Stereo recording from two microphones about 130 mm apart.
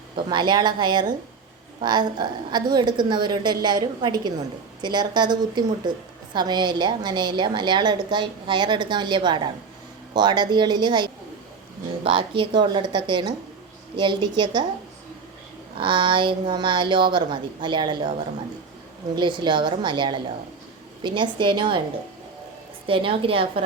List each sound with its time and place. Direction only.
0.3 s a woman's voice: 35° right (ahead or behind)
15.7 s a woman's voice: 40° right (ahead or behind)
22.9 s a woman's voice: 45° right (ahead or behind)